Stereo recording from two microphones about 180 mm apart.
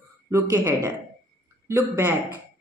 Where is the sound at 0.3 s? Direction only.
15° right (ahead or behind).